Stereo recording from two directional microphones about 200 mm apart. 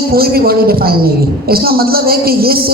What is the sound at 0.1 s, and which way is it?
A woman's voice, 50° right (ahead or behind).